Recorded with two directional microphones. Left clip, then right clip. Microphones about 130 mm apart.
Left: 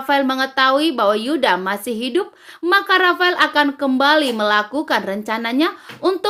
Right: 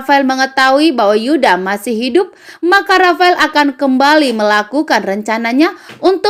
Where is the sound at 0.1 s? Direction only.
30° right (ahead or behind).